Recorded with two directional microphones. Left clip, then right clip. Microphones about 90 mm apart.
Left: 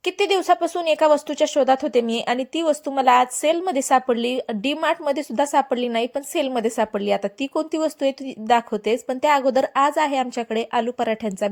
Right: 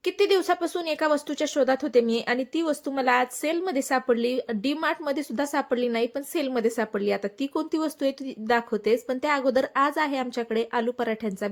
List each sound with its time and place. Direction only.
0.0 s a woman's voice: 30° left (ahead or behind)